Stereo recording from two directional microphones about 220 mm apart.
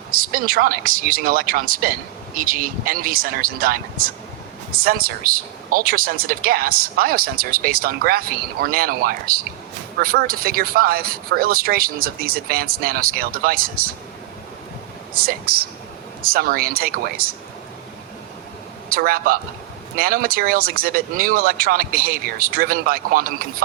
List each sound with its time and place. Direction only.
0.1 s speech: 40° right (ahead or behind)
16.2 s speech: 40° right (ahead or behind)
18.9 s speech: 40° right (ahead or behind)